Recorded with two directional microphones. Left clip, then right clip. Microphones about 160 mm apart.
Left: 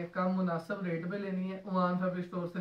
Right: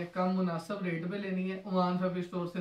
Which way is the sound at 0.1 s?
Centre (ahead or behind).